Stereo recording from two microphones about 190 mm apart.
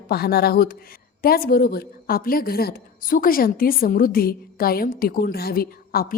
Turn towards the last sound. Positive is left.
turn(degrees=50)  # may be behind; listen again after turning